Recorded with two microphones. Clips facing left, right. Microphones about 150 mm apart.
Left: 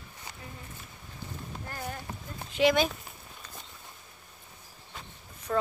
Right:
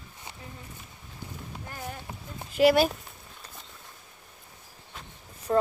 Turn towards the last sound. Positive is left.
turn(degrees=-25)  # may be behind; listen again after turning